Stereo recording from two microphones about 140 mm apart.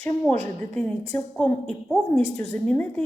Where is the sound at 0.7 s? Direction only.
10° left (ahead or behind).